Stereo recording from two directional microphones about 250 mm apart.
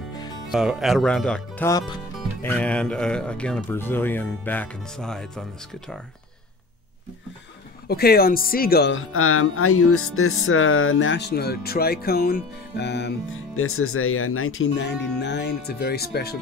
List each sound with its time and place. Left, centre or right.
0.5 s speech: centre
7.9 s speech: left
13.6 s speech: left